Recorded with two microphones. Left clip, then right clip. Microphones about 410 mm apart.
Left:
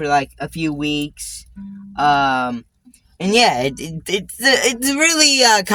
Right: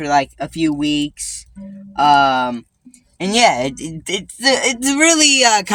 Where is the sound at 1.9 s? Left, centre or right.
Left.